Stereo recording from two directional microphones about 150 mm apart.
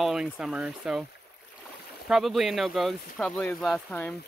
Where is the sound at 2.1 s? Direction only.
Centre (ahead or behind).